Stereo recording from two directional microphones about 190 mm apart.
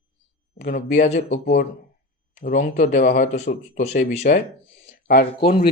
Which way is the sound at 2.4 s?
45° left (ahead or behind).